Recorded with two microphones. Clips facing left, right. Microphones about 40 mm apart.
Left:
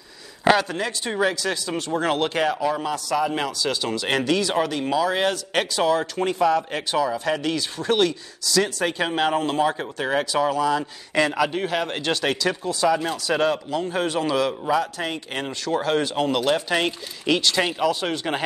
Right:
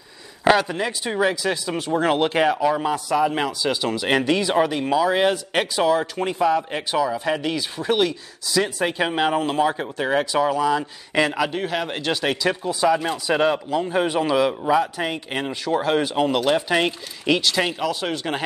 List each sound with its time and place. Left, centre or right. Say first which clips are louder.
0.6 s a man's voice: right 2 dB; centre